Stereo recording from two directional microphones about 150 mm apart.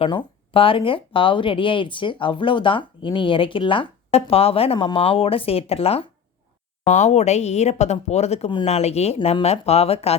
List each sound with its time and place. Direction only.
0.0 s speech: 35° left (ahead or behind)